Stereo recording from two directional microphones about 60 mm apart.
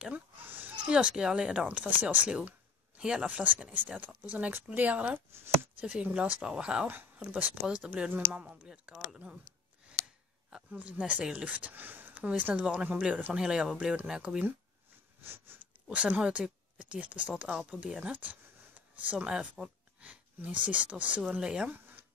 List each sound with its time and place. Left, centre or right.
0.5 s a sound: right
0.8 s speech: centre
3.0 s speech: centre
6.9 s speech: right
10.7 s speech: right
15.2 s a sound: right
15.9 s speech: right
18.1 s speech: right
19.1 s speech: centre
20.0 s speech: right
21.6 s a sound: right